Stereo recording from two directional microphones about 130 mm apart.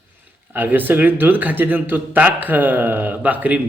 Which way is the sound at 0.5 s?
15° right (ahead or behind).